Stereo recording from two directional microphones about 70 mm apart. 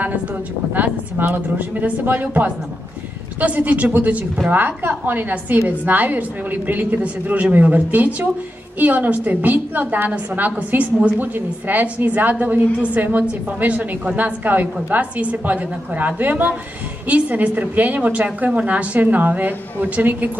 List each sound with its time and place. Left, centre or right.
0.7 s a woman's voice: right